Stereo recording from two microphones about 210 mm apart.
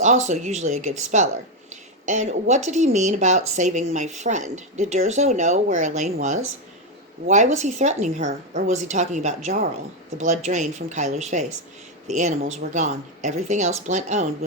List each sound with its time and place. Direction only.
0.0 s speech: 35° right (ahead or behind)